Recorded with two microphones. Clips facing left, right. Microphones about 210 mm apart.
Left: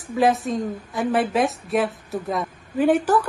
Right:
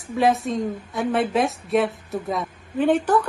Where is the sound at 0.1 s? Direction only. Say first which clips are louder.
Even; centre (ahead or behind).